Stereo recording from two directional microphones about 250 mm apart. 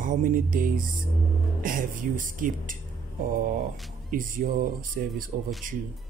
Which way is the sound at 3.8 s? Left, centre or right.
Centre.